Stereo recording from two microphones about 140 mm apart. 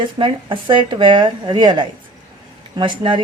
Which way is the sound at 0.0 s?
35° right (ahead or behind).